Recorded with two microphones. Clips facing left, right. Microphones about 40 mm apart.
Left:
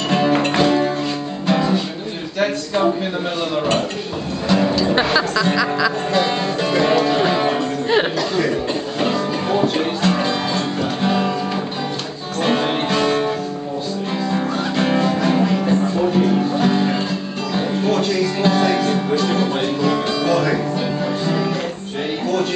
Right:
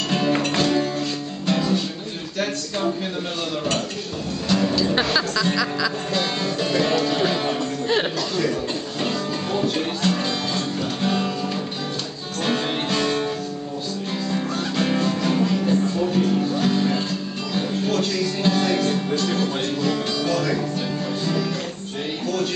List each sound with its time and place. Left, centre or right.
0.1 s music: centre
2.4 s speech: centre
4.5 s speech: centre
4.7 s music: centre
12.4 s music: centre
14.3 s music: centre
17.6 s music: centre